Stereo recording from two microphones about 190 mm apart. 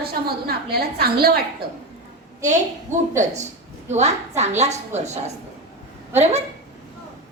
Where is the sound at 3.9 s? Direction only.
35° right (ahead or behind).